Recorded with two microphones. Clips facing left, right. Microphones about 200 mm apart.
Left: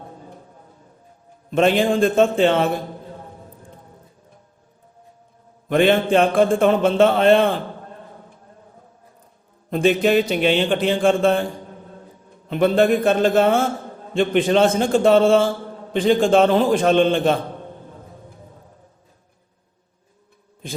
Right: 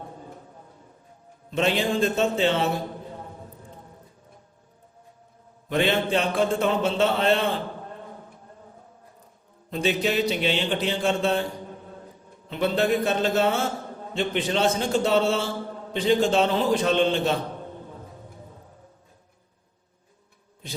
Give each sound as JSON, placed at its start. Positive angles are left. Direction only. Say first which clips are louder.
{"t": 1.5, "sound": "a man's voice", "louder": "left 7 dB", "side_deg": 50}
{"t": 5.6, "sound": "a man's voice", "louder": "left 7 dB", "side_deg": 50}
{"t": 9.6, "sound": "a man's voice", "louder": "left 7 dB", "side_deg": 50}
{"t": 12.5, "sound": "a man's voice", "louder": "left 7 dB", "side_deg": 50}
{"t": 20.6, "sound": "a man's voice", "louder": "left 6 dB", "side_deg": 50}